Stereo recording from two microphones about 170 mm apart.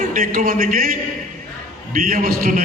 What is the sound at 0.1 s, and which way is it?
Speech, 55° right (ahead or behind).